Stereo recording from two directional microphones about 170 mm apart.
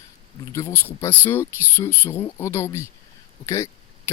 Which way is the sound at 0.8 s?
10° left (ahead or behind).